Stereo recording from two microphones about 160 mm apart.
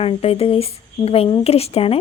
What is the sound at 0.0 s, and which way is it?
Speech, 35° left (ahead or behind).